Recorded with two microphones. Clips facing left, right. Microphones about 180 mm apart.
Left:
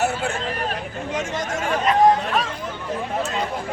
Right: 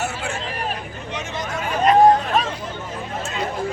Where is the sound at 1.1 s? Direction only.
50° left (ahead or behind).